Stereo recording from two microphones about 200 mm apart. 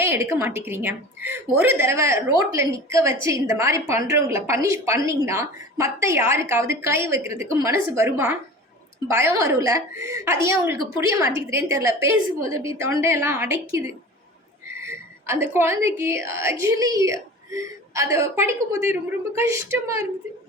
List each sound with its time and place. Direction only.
0.0 s a woman's voice: 15° right (ahead or behind)